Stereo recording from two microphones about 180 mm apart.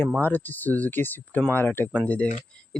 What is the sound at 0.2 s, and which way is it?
Speech, 10° left (ahead or behind).